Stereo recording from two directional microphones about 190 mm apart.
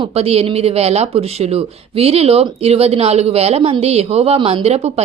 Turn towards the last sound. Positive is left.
turn(degrees=-35)  # may be behind; listen again after turning